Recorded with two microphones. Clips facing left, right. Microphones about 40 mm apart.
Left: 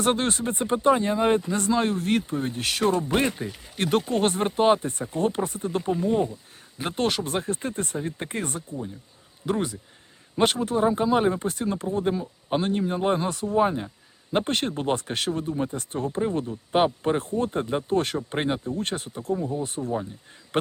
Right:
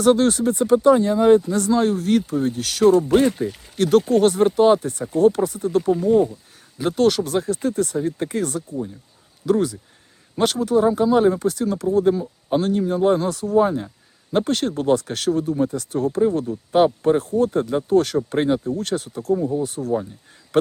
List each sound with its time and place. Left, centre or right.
0.0 s speech: left
6.7 s speech: left